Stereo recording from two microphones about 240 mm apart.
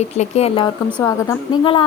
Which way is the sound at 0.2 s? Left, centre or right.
Left.